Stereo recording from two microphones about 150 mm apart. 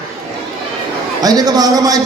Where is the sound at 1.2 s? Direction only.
25° right (ahead or behind).